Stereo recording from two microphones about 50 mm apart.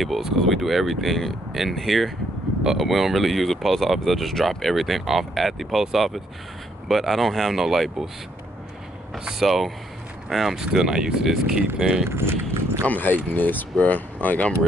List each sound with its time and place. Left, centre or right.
0.4 s speech: centre
9.2 s speech: centre
12.1 s speech: right
12.8 s speech: left